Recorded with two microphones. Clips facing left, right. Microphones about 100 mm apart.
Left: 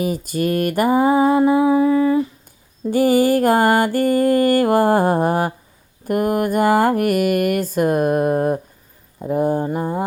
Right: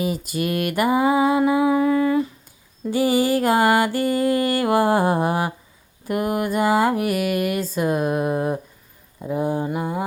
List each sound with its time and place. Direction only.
0.0 s lullaby: 40° left (ahead or behind); by 2.2 s 25° left (ahead or behind)
2.9 s music: 50° left (ahead or behind)
9.6 s lullaby: 40° left (ahead or behind)